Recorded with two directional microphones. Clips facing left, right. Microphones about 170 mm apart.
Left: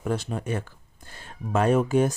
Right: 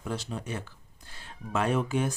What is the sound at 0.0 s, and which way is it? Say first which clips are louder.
Speech: left 6 dB; 55° left (ahead or behind).